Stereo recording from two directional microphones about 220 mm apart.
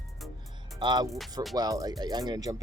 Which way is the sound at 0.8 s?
20° right (ahead or behind).